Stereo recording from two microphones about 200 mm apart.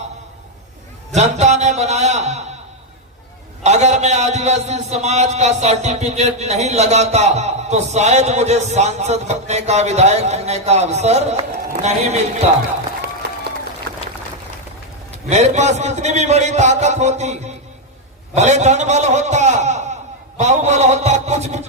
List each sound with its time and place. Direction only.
1.1 s a man's voice: 35° right (ahead or behind)
3.6 s a man's voice: 35° right (ahead or behind)
15.3 s a man's voice: 35° right (ahead or behind)
18.3 s a man's voice: 35° right (ahead or behind)